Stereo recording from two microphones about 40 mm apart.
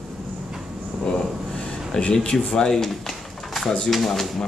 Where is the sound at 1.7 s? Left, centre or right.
Left.